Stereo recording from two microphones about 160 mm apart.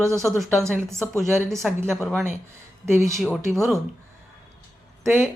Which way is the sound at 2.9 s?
15° right (ahead or behind).